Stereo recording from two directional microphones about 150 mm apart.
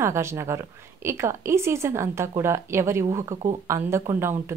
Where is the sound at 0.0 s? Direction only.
20° right (ahead or behind).